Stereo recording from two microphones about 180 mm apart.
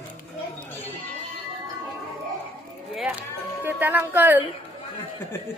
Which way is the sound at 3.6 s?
10° right (ahead or behind).